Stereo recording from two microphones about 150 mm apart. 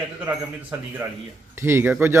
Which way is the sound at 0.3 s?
10° right (ahead or behind).